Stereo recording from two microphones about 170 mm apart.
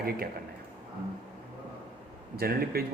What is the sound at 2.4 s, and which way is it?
Speech, 65° right (ahead or behind).